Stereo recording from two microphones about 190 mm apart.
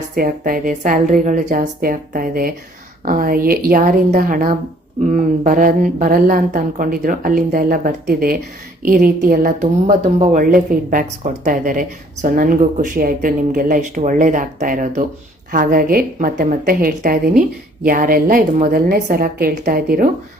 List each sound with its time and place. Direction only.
0.2 s speech: 50° right (ahead or behind)
9.8 s speech: 40° right (ahead or behind)